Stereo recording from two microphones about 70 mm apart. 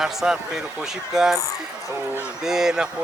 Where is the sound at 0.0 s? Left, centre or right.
Centre.